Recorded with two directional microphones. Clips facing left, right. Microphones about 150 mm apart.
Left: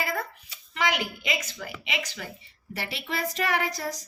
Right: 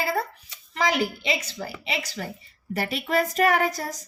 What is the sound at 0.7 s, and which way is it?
A woman's voice, 35° right (ahead or behind).